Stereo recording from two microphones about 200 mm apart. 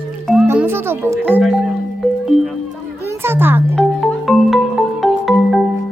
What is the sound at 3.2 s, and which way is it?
Music, 10° right (ahead or behind).